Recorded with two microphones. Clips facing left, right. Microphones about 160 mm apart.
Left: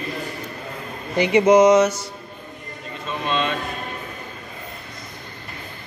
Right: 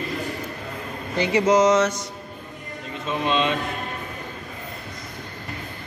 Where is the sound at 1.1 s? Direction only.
20° left (ahead or behind).